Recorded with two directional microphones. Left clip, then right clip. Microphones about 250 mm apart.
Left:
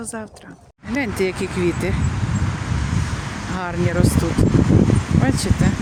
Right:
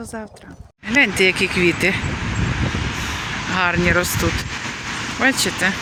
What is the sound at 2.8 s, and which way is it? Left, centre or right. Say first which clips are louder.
Vehicle: right 4 dB; left.